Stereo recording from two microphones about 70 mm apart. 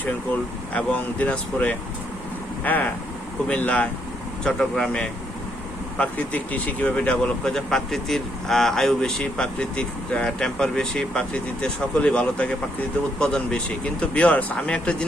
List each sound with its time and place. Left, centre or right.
0.7 s speech: centre
4.4 s speech: centre
6.0 s speech: left